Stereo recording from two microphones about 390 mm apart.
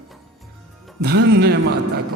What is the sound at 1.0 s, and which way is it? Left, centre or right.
Speech, right.